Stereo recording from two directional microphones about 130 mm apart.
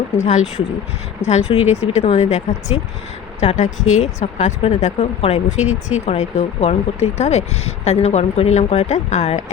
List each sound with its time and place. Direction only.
0.2 s speech: 60° left (ahead or behind)